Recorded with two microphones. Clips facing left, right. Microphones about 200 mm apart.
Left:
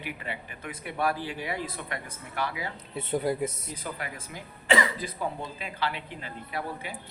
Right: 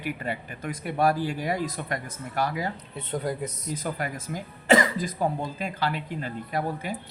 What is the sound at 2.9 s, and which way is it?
Speech, 5° left (ahead or behind).